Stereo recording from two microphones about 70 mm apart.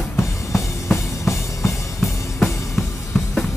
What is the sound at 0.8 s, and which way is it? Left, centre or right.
Music, left.